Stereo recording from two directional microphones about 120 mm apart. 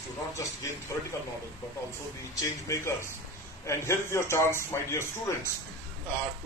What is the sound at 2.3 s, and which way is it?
A man's voice, 25° left (ahead or behind).